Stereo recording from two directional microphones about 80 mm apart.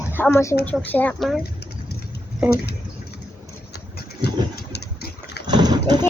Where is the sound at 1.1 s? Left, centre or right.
Centre.